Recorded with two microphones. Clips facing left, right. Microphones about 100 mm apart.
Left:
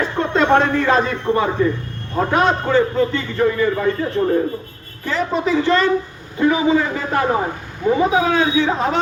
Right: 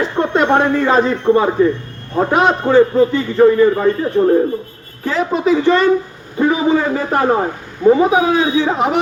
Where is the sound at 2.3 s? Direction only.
20° right (ahead or behind).